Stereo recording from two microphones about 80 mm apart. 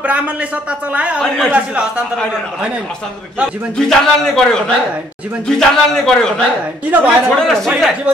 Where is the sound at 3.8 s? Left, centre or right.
Centre.